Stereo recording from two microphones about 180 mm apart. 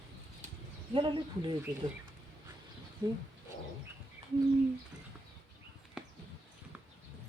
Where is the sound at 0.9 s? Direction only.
25° right (ahead or behind).